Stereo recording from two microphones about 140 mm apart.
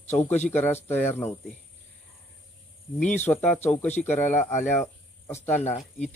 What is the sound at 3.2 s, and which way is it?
Speech, 10° left (ahead or behind).